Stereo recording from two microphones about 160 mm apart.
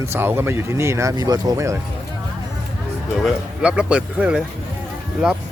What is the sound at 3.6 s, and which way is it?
Speech, 5° right (ahead or behind).